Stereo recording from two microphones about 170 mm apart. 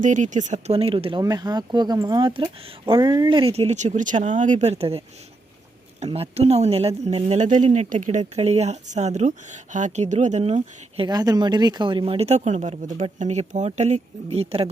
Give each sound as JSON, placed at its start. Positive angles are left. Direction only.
{"t": 0.0, "sound": "speech", "side_deg": -45}
{"t": 8.2, "sound": "speech", "side_deg": -35}